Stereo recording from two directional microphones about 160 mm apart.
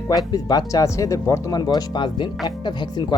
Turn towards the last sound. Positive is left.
turn(degrees=30)  # may be behind; listen again after turning